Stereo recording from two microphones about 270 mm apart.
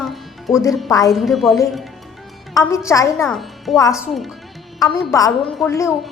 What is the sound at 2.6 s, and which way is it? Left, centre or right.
Speech, centre.